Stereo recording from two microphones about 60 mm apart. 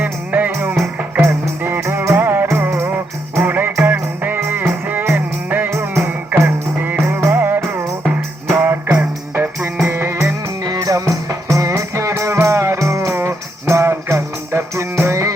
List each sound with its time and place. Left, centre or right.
0.0 s music: right
5.7 s music: right
7.3 s music: right
8.9 s music: right
10.7 s music: right